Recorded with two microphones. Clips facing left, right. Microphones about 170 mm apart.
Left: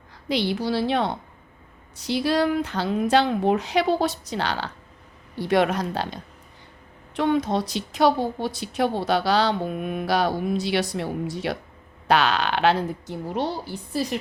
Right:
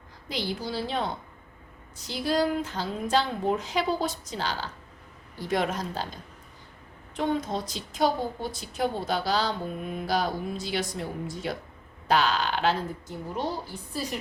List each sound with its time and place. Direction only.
0.3 s a woman's voice: 70° left (ahead or behind)
7.2 s a woman's voice: 70° left (ahead or behind)